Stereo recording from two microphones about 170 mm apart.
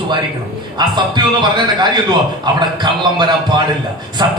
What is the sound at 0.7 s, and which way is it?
A man's voice, 25° right (ahead or behind).